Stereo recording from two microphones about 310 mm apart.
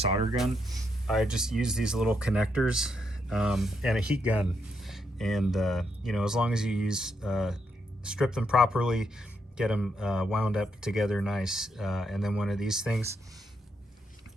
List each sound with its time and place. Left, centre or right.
0.0 s speech: centre
0.3 s speech: centre